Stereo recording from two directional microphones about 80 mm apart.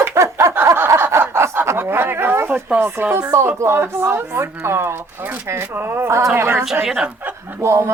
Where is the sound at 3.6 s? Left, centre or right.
Right.